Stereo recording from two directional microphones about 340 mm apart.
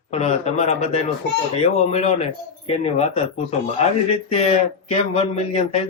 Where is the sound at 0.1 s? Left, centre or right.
Centre.